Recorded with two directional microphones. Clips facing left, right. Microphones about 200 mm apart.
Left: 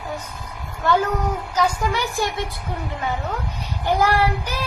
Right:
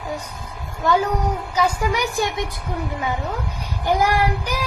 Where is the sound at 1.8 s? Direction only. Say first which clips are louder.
Right 1 dB; 15° right (ahead or behind).